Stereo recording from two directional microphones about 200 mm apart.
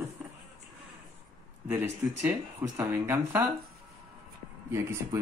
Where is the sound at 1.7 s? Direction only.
10° right (ahead or behind).